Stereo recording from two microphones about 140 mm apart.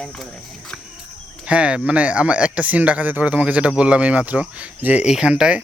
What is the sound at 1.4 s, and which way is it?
Speech, 10° right (ahead or behind).